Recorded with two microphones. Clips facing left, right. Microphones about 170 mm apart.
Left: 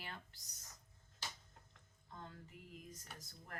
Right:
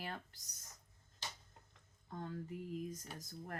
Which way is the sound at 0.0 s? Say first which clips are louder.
Right 6 dB; 45° right (ahead or behind).